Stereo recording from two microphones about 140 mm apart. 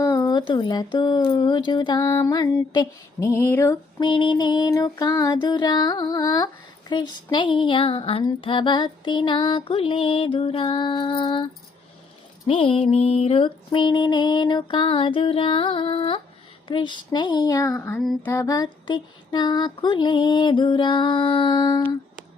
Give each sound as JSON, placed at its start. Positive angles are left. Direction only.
{"t": 0.0, "sound": "a sound", "side_deg": 20}
{"t": 0.9, "sound": "music", "side_deg": 30}
{"t": 4.0, "sound": "music", "side_deg": 35}
{"t": 12.5, "sound": "music", "side_deg": 40}